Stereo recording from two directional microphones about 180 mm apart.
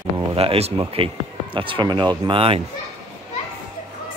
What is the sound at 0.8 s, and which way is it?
Speech, 30° right (ahead or behind).